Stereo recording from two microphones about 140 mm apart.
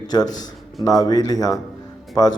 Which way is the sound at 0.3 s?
65° left (ahead or behind).